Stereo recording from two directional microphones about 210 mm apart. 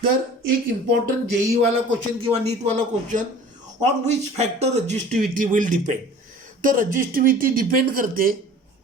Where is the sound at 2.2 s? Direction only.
30° right (ahead or behind).